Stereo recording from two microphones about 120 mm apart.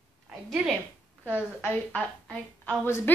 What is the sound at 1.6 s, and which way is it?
A woman's voice, 15° left (ahead or behind).